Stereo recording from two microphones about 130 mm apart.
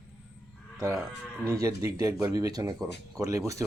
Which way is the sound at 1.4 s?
25° right (ahead or behind).